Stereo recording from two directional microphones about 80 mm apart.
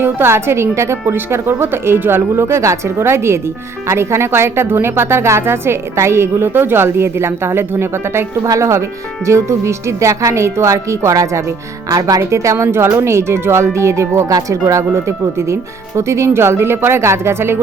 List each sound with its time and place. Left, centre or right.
0.0 s speech: right
8.4 s speech: right